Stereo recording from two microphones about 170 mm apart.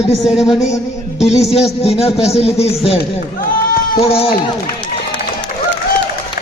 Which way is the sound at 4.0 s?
35° left (ahead or behind).